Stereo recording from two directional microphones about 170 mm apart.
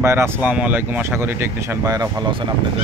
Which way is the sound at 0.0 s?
15° right (ahead or behind).